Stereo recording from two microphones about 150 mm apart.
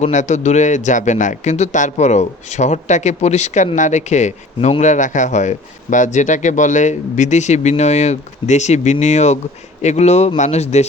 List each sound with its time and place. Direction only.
0.0 s speech: 55° left (ahead or behind)